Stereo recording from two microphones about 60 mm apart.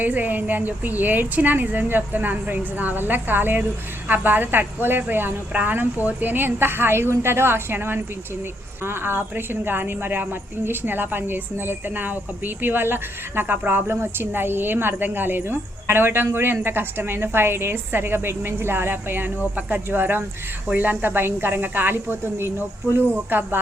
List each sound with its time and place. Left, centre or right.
0.0 s a woman's voice: right